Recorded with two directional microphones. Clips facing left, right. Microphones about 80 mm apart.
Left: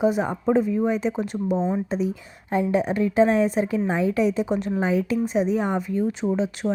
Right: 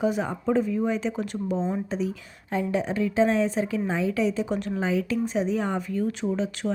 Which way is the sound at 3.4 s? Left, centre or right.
Left.